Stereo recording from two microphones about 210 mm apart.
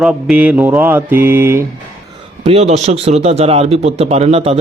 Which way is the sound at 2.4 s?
30° right (ahead or behind).